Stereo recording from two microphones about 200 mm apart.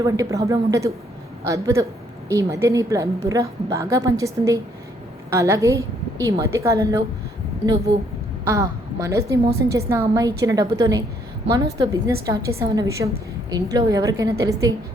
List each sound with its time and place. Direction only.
0.0 s a woman's voice: 15° right (ahead or behind)
8.4 s a woman's voice: 15° right (ahead or behind)